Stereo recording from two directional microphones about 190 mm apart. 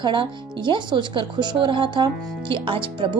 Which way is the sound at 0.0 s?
25° right (ahead or behind).